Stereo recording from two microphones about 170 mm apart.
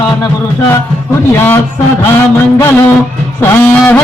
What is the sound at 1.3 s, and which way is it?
Speech, 10° left (ahead or behind).